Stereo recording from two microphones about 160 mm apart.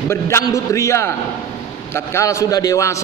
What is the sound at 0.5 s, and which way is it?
A man's voice, 20° left (ahead or behind).